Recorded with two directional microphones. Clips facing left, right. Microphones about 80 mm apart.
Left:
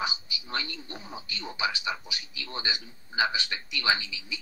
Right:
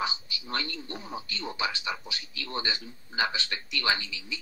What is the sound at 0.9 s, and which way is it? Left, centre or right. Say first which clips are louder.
Speech: right 3 dB; centre.